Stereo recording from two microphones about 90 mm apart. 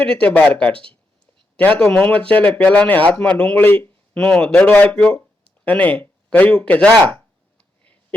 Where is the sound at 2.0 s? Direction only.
15° left (ahead or behind).